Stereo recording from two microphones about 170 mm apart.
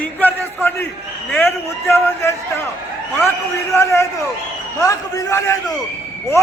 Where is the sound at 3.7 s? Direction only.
15° left (ahead or behind).